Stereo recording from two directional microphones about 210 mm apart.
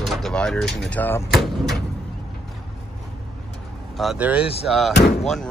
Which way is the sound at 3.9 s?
5° right (ahead or behind).